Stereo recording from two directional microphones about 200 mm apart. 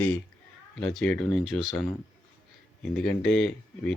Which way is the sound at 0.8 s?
5° left (ahead or behind).